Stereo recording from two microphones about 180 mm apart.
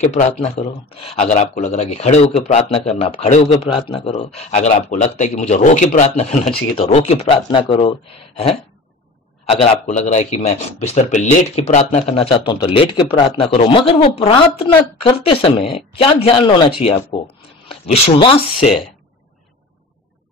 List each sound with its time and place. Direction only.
0.0 s speech: 35° left (ahead or behind)
9.5 s speech: 35° left (ahead or behind)